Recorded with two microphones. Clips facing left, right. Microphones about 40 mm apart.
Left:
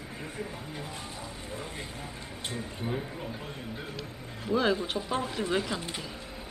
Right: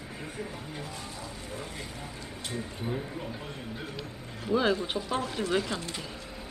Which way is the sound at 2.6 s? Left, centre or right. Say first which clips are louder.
Even; centre.